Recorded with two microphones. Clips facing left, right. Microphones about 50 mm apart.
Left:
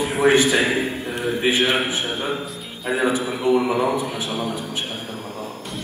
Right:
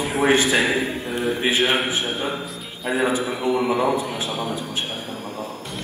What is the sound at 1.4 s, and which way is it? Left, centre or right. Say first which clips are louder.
Speech: left 2 dB; left.